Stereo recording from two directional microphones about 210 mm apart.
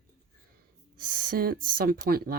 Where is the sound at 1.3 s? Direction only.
45° right (ahead or behind).